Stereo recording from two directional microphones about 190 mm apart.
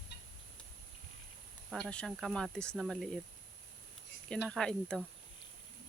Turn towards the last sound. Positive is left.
turn(degrees=5)  # may be behind; listen again after turning